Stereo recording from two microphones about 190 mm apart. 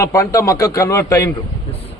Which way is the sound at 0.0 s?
15° left (ahead or behind).